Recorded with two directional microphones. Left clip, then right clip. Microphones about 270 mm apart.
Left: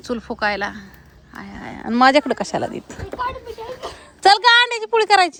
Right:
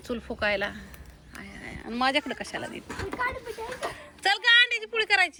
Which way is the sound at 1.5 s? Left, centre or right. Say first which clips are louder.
Left 11 dB; left.